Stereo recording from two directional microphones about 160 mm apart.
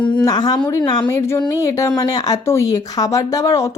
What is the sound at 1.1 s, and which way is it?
Speech, 15° left (ahead or behind).